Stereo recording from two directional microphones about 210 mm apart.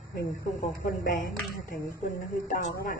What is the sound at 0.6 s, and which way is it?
Speech, 40° left (ahead or behind).